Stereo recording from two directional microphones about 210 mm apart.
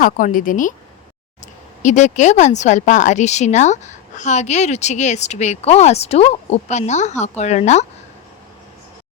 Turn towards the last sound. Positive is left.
turn(degrees=30)  # may be behind; listen again after turning